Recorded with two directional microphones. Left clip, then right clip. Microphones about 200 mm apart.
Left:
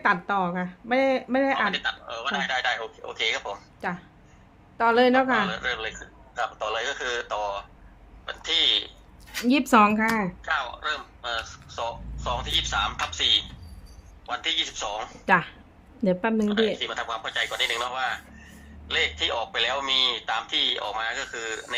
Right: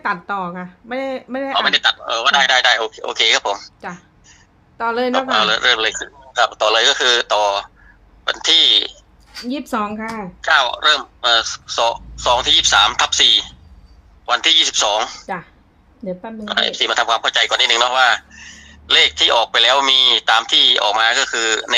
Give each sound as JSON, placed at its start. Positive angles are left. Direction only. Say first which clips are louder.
{"t": 0.0, "sound": "speech", "louder": "right 2 dB", "side_deg": -5}
{"t": 1.5, "sound": "speech", "louder": "right 11 dB", "side_deg": -60}
{"t": 3.8, "sound": "a woman's voice", "louder": "right 1 dB", "side_deg": -5}
{"t": 5.3, "sound": "speech", "louder": "right 11 dB", "side_deg": -60}
{"t": 9.4, "sound": "speech", "louder": "left 3 dB", "side_deg": 15}
{"t": 10.4, "sound": "speech", "louder": "right 14 dB", "side_deg": -60}
{"t": 16.5, "sound": "speech", "louder": "right 8 dB", "side_deg": -60}